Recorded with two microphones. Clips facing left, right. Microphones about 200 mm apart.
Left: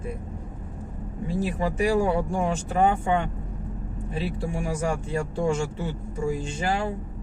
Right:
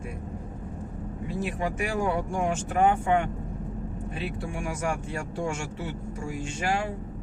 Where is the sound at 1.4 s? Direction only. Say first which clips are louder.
Left 4 dB; 35° left (ahead or behind).